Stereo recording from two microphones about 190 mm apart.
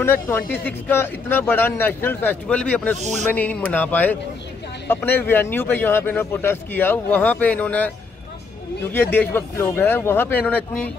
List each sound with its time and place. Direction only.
0.0 s a man's voice: 10° left (ahead or behind)
8.9 s a man's voice: 10° left (ahead or behind)